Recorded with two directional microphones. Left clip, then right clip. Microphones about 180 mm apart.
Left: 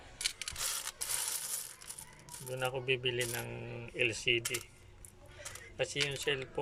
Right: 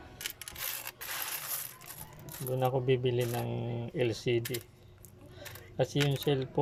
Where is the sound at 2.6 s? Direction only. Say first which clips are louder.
Right 5 dB; 20° right (ahead or behind).